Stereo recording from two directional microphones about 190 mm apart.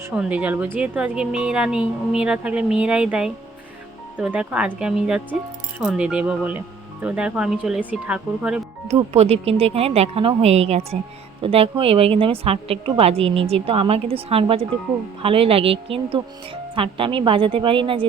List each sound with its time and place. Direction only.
0.0 s speech: 5° right (ahead or behind)
8.9 s a woman's voice: 35° right (ahead or behind)